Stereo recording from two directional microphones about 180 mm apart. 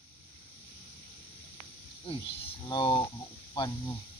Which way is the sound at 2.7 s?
25° left (ahead or behind).